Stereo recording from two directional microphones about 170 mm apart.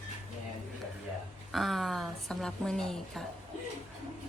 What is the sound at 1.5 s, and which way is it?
A woman's voice, centre (ahead or behind).